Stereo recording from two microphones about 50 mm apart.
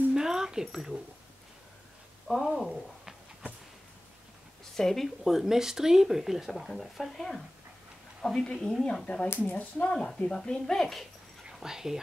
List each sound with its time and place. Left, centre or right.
0.1 s a sound: centre
2.2 s speech: centre
4.7 s speech: centre
9.0 s speech: left; by 11.1 s centre
11.4 s speech: centre